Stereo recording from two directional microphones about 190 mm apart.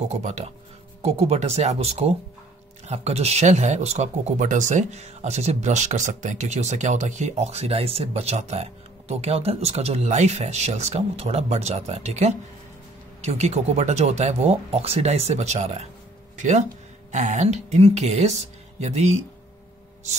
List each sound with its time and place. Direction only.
0.1 s speech: 35° right (ahead or behind)